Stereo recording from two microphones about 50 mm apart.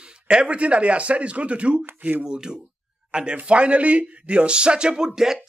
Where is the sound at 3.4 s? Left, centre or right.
Right.